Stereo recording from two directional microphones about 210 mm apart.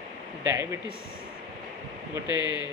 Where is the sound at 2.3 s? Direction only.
20° left (ahead or behind).